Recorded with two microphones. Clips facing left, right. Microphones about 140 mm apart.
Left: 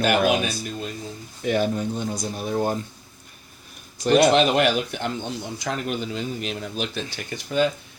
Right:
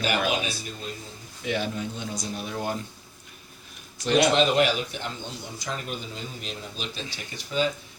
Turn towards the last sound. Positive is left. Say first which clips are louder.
# left 5 dB
turn(degrees=60)  # may be behind; listen again after turning